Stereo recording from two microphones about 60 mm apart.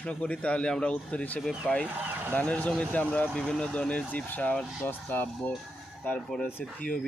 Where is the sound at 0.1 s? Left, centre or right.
Centre.